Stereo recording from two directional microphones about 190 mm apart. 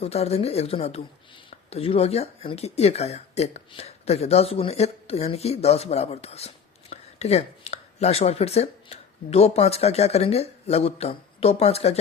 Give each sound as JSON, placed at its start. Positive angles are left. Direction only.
{"t": 0.0, "sound": "speech", "side_deg": 35}